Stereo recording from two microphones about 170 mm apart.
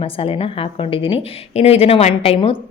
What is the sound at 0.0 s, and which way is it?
A woman's voice, 35° left (ahead or behind).